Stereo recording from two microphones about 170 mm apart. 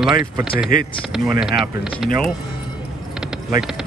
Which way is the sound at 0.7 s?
55° left (ahead or behind).